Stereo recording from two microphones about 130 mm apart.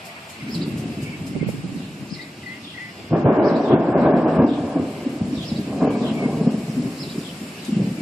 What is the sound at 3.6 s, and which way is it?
Train, 5° right (ahead or behind).